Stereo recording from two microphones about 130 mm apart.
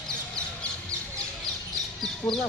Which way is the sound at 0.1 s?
5° left (ahead or behind).